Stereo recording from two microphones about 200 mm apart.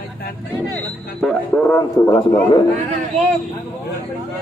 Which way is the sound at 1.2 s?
5° left (ahead or behind).